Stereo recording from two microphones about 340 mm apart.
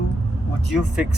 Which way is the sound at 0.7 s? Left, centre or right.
Centre.